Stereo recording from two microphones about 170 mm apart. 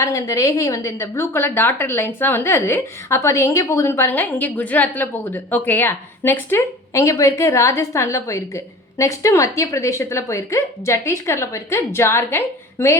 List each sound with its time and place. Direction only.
0.0 s speech: 20° left (ahead or behind)